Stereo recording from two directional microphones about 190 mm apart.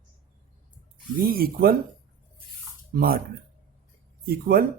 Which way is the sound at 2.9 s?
50° right (ahead or behind).